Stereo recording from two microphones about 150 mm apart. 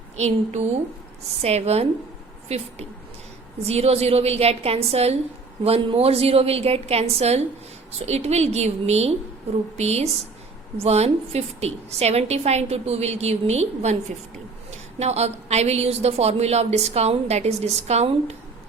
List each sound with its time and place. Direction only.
0.2 s a woman's voice: 50° right (ahead or behind)
14.9 s a woman's voice: 45° right (ahead or behind)